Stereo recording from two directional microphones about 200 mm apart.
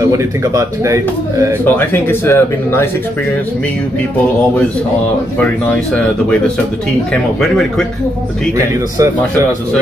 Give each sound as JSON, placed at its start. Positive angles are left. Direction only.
{"t": 0.0, "sound": "speech", "side_deg": -15}
{"t": 1.8, "sound": "speech", "side_deg": 10}
{"t": 7.4, "sound": "speech", "side_deg": 5}
{"t": 8.5, "sound": "speech", "side_deg": -15}